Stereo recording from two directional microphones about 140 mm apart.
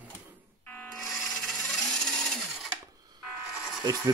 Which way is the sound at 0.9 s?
Centre (ahead or behind).